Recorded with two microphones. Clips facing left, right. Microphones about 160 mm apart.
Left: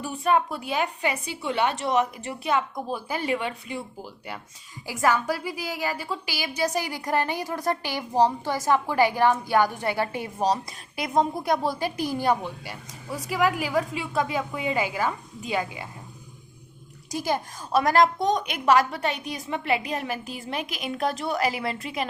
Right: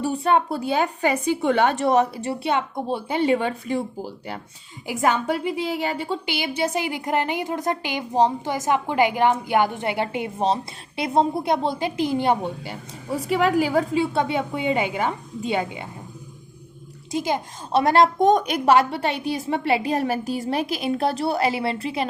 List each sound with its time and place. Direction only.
0.0 s a woman's voice: 30° right (ahead or behind)
1.1 s a woman's voice: 50° right (ahead or behind); by 3.8 s 35° right (ahead or behind)
4.9 s a woman's voice: 20° right (ahead or behind)
17.1 s a woman's voice: 20° right (ahead or behind)
18.2 s a woman's voice: 50° right (ahead or behind)
18.4 s a woman's voice: 35° right (ahead or behind)